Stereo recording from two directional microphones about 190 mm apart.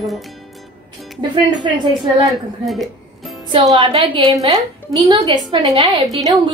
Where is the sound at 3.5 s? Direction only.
25° right (ahead or behind).